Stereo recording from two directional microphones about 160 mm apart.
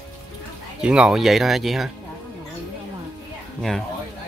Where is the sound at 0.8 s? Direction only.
5° right (ahead or behind).